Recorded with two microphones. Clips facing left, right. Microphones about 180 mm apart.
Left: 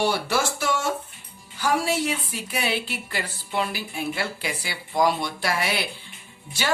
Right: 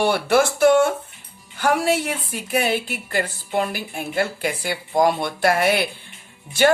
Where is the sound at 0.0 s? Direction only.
55° right (ahead or behind).